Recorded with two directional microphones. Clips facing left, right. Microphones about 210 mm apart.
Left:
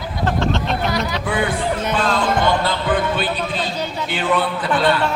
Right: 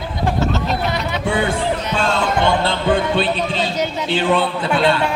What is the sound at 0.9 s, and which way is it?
Speech, 25° right (ahead or behind).